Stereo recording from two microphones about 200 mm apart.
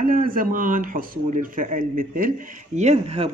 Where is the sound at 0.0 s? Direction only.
45° right (ahead or behind).